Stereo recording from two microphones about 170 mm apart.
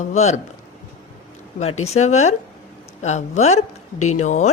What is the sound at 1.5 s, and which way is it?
Speech, 40° left (ahead or behind).